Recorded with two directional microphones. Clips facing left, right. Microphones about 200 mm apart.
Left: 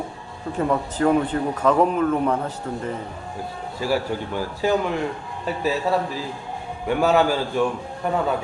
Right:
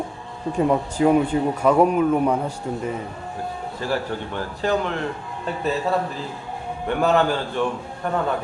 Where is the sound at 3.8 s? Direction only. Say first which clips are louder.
Left 3 dB; 10° left (ahead or behind).